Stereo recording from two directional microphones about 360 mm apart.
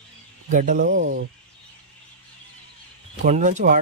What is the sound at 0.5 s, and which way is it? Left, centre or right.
Speech, right.